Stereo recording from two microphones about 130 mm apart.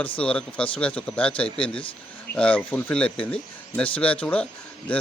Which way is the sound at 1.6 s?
40° left (ahead or behind).